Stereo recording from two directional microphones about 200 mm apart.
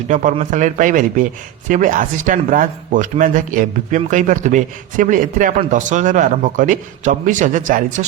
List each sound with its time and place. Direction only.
0.1 s a man's voice: 40° right (ahead or behind)